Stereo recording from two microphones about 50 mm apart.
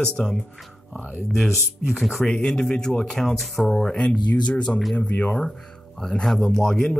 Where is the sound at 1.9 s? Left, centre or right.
Centre.